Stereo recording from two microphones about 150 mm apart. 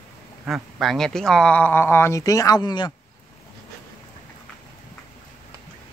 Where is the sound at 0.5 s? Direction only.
Centre (ahead or behind); by 2.9 s 30° left (ahead or behind).